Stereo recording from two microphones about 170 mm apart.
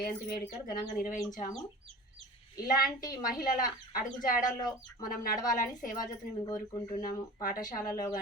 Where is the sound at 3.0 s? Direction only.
20° left (ahead or behind).